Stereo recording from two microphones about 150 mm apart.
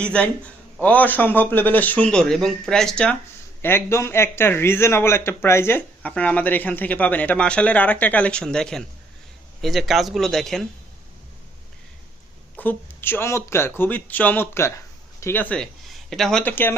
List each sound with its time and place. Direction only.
0.0 s a man's voice: 10° left (ahead or behind)
12.5 s a man's voice: 15° left (ahead or behind)